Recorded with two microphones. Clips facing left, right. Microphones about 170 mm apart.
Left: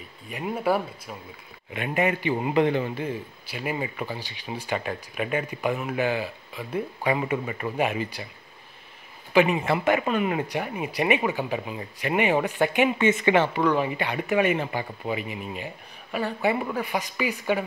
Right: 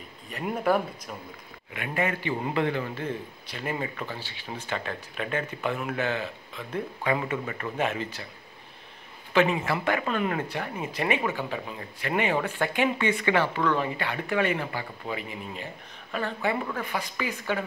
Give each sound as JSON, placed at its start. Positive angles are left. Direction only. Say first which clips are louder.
{"t": 0.5, "sound": "speech", "louder": "even", "side_deg": 5}
{"t": 1.7, "sound": "speech", "louder": "left 4 dB", "side_deg": 20}
{"t": 9.3, "sound": "speech", "louder": "left 3 dB", "side_deg": 15}